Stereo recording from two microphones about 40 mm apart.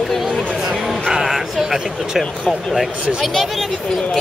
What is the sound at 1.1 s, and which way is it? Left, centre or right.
Speech, centre.